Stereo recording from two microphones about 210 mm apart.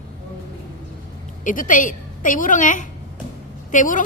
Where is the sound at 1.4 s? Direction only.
40° left (ahead or behind).